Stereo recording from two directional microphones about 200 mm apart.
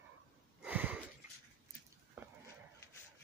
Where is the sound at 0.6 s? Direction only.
10° right (ahead or behind).